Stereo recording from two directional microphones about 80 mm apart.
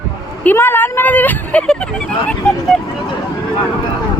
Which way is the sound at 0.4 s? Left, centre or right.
Left.